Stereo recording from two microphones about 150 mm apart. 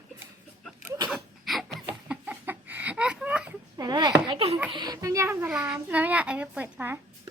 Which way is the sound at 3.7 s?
30° right (ahead or behind).